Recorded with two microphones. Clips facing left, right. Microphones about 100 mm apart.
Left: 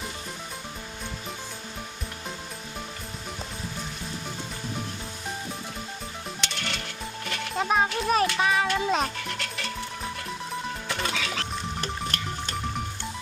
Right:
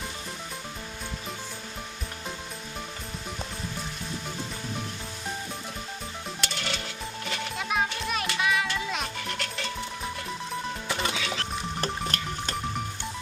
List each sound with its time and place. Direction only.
6.4 s music: 5° right (ahead or behind)
7.5 s music: 35° left (ahead or behind)
9.1 s music: centre (ahead or behind)
10.8 s music: 10° right (ahead or behind)
11.8 s music: 40° right (ahead or behind)